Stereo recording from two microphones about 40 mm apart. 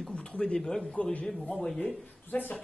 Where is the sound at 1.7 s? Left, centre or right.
Left.